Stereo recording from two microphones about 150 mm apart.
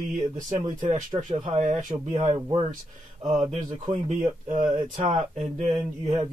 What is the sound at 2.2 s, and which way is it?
Speech, 35° right (ahead or behind).